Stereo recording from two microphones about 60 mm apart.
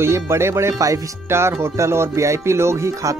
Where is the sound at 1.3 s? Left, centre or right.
Right.